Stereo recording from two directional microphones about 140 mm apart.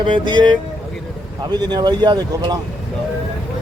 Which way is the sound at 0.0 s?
35° right (ahead or behind).